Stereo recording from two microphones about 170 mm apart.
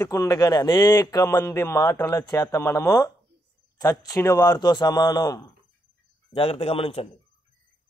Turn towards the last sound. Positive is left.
turn(degrees=35)  # may be behind; listen again after turning